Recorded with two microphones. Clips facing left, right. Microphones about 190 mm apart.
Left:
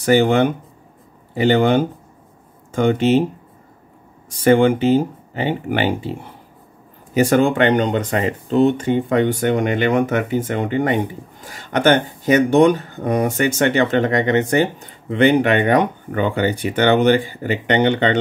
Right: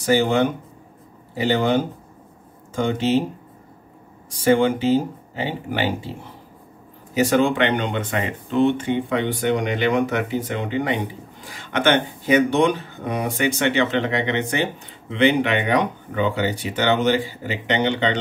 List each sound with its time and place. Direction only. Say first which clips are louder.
0.0 s speech: left 4 dB; 60° left (ahead or behind)
4.5 s speech: left 4 dB; 60° left (ahead or behind)
7.2 s speech: left 3 dB; 50° left (ahead or behind)